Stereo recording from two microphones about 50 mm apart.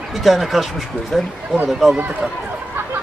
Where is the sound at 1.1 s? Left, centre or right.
Centre.